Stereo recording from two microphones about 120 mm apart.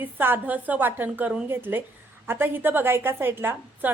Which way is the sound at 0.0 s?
15° right (ahead or behind).